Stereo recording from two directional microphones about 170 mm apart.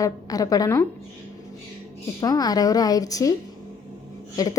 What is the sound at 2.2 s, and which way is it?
A woman's voice, 20° left (ahead or behind).